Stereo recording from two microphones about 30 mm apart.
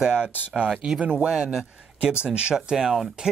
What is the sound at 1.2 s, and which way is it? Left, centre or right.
Speech, right.